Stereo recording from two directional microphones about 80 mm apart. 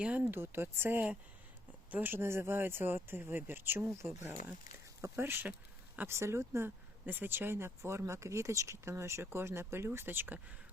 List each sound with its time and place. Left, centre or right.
0.0 s speech: centre
0.3 s speech: right